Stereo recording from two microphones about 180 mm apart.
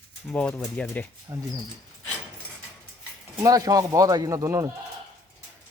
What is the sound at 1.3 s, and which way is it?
Speech, 20° right (ahead or behind).